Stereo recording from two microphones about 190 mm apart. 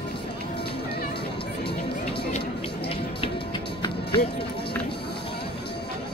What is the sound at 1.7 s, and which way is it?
Music, 30° left (ahead or behind).